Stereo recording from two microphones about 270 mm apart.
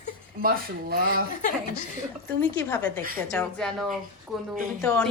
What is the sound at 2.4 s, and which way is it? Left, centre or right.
Speech, centre.